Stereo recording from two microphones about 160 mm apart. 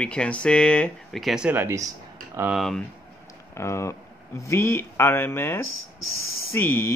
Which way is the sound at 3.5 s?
15° left (ahead or behind).